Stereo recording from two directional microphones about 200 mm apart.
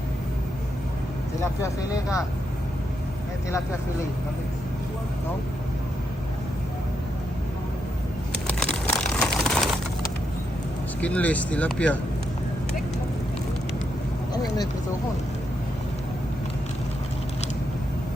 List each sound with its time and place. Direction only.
1.4 s speech: 15° left (ahead or behind)
8.4 s crumpling: 5° left (ahead or behind)
11.0 s speech: 5° left (ahead or behind)
14.3 s speech: 20° left (ahead or behind)